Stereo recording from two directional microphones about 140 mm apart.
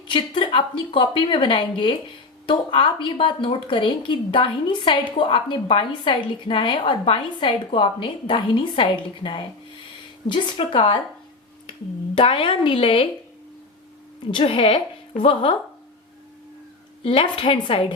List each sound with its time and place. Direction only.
0.1 s a woman's voice: 35° left (ahead or behind)
12.1 s a woman's voice: 40° left (ahead or behind)
14.3 s a woman's voice: 35° left (ahead or behind)
17.0 s a woman's voice: 40° left (ahead or behind)